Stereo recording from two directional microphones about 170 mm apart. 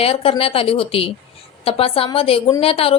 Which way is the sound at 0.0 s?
35° left (ahead or behind).